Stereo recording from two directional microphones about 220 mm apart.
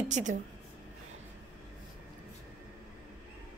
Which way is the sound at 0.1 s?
35° right (ahead or behind).